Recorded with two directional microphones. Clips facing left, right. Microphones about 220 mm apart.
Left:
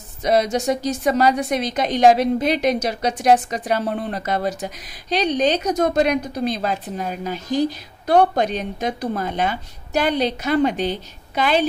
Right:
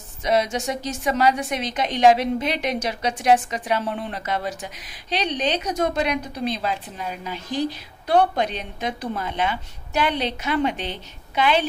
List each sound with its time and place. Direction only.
0.2 s a woman's voice: 40° left (ahead or behind)